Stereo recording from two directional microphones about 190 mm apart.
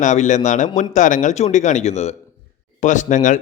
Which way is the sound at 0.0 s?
40° left (ahead or behind).